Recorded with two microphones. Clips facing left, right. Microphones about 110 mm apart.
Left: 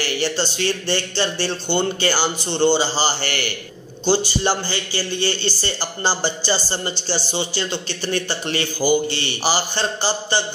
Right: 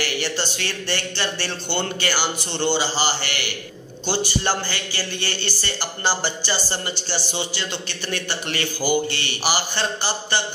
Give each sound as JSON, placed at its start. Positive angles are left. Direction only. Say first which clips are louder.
{"t": 0.0, "sound": "a man's voice", "louder": "left 3 dB", "side_deg": 30}
{"t": 4.0, "sound": "a man's voice", "louder": "left 5 dB", "side_deg": 25}